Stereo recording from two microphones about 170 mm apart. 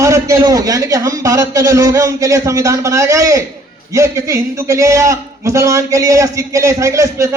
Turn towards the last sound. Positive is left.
turn(degrees=-20)  # may be behind; listen again after turning